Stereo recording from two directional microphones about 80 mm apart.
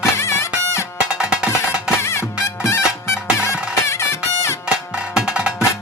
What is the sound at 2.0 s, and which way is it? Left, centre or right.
Music, left.